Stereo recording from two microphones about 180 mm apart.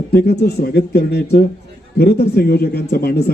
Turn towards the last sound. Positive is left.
turn(degrees=60)  # may be behind; listen again after turning